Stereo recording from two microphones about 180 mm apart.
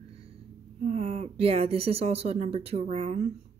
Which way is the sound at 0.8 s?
35° right (ahead or behind).